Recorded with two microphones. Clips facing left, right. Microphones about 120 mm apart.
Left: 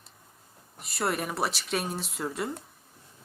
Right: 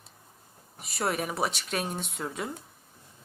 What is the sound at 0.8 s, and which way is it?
Speech, centre (ahead or behind).